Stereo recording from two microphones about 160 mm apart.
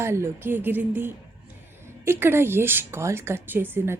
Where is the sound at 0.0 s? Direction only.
15° right (ahead or behind).